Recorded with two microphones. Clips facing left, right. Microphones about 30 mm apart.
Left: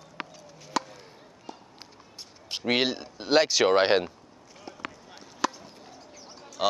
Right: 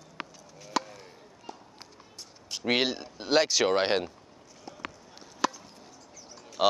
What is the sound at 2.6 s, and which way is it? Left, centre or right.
Speech, centre.